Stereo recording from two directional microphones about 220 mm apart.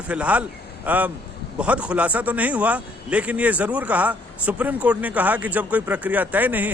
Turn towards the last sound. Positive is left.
turn(degrees=-10)  # may be behind; listen again after turning